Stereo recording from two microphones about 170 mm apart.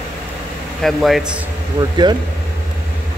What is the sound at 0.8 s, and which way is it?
Speech, centre (ahead or behind).